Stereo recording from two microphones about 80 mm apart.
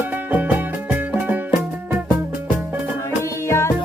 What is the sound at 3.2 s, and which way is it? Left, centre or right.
Music, left.